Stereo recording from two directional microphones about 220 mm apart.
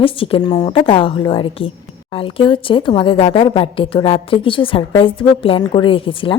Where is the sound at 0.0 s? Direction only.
25° left (ahead or behind).